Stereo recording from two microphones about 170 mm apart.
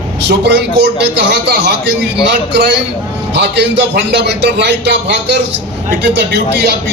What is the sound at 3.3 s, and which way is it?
A man's voice, 90° right.